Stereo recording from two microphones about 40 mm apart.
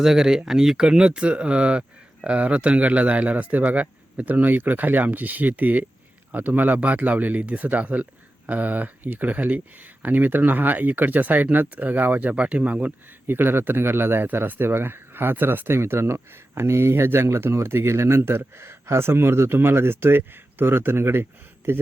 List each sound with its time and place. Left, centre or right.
0.0 s speech: centre
0.9 s speech: right
13.2 s speech: right
14.4 s speech: right